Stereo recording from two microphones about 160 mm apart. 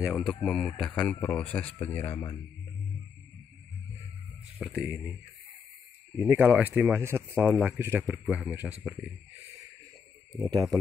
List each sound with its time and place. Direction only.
0.0 s speech: centre (ahead or behind)
4.6 s speech: 5° right (ahead or behind)
6.1 s speech: 10° right (ahead or behind)
10.4 s speech: 25° right (ahead or behind)